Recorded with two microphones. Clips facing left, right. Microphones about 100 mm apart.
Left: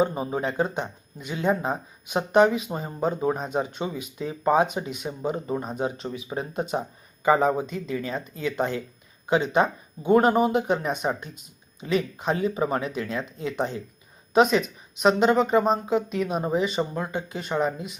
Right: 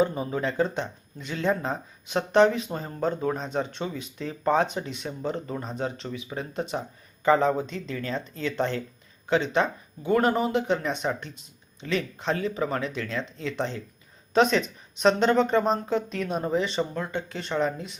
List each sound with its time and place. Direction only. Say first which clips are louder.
0.0 s speech: left 1 dB; 25° left (ahead or behind)